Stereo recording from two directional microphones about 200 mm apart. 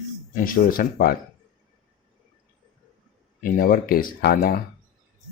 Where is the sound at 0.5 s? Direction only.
45° left (ahead or behind).